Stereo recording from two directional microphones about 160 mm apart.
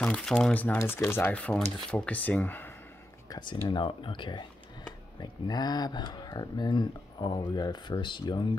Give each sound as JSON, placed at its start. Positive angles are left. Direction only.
{"t": 0.0, "sound": "speech", "side_deg": 5}
{"t": 3.3, "sound": "speech", "side_deg": 30}